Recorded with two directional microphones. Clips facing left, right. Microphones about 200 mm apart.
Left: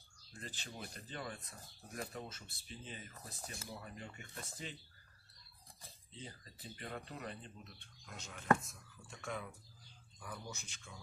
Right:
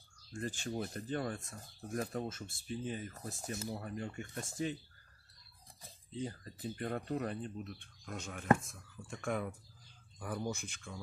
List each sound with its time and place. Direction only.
0.3 s speech: 50° right (ahead or behind)
6.2 s speech: 50° right (ahead or behind)